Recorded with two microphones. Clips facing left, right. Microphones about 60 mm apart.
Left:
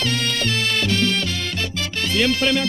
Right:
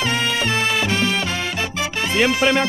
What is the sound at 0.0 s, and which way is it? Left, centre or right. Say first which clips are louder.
Music: right 2 dB; centre.